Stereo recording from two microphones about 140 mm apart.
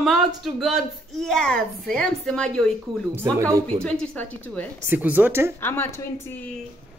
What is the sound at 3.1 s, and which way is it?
Speech, 15° right (ahead or behind).